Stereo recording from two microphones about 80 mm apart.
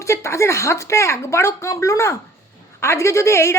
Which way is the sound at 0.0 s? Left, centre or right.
Left.